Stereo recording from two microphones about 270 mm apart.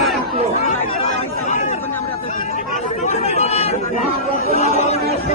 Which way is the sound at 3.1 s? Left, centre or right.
Left.